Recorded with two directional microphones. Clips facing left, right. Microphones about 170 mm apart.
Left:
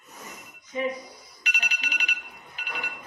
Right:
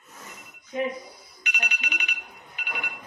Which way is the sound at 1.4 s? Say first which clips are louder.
Right 2 dB; 35° left (ahead or behind).